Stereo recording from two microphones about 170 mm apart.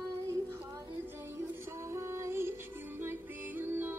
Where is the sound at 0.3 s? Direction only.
15° right (ahead or behind).